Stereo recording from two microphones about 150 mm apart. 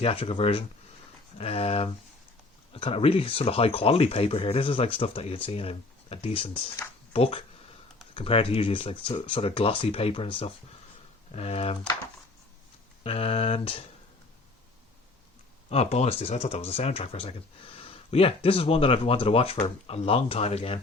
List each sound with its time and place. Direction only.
0.0 s speech: 40° left (ahead or behind)
13.0 s speech: 40° left (ahead or behind)
15.7 s speech: 45° left (ahead or behind)